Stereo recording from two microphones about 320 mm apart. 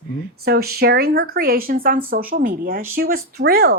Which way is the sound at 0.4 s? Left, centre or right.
Right.